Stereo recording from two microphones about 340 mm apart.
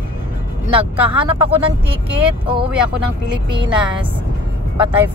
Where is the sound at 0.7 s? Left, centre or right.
Centre.